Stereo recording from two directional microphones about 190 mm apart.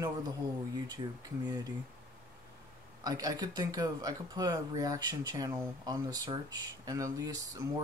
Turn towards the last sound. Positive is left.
turn(degrees=-20)  # may be behind; listen again after turning